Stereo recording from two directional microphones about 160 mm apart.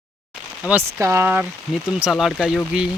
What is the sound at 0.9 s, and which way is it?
Speech, 15° right (ahead or behind).